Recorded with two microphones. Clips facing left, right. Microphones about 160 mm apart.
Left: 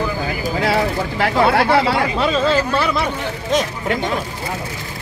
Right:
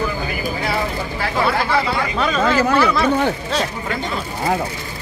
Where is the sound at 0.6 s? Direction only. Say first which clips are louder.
Left 7 dB; 75° left (ahead or behind).